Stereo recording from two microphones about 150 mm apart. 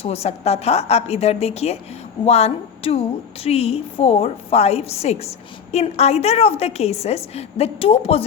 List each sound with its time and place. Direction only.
0.0 s a woman's voice: 45° left (ahead or behind)